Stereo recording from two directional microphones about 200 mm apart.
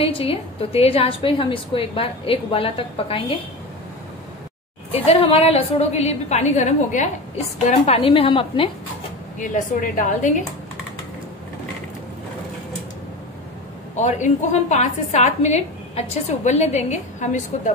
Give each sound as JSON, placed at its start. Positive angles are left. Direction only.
{"t": 0.0, "sound": "a woman's voice", "side_deg": 30}
{"t": 4.9, "sound": "a woman's voice", "side_deg": 30}
{"t": 9.4, "sound": "a woman's voice", "side_deg": 40}
{"t": 13.9, "sound": "a woman's voice", "side_deg": 35}